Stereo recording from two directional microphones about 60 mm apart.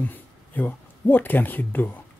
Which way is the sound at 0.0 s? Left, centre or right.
Left.